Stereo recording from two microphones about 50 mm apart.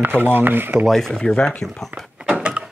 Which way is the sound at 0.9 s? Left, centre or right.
Centre.